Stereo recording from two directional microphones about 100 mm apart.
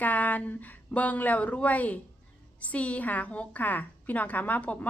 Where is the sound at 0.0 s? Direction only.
15° left (ahead or behind).